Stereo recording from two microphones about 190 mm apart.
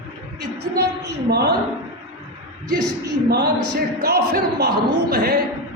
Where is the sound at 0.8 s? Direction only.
60° right (ahead or behind).